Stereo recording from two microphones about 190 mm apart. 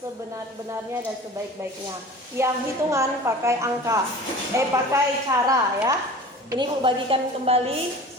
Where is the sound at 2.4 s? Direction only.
15° right (ahead or behind).